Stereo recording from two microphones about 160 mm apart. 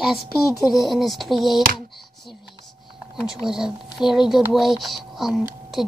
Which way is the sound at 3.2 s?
5° right (ahead or behind).